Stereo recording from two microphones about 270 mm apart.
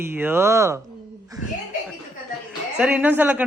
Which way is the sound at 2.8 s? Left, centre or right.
Centre.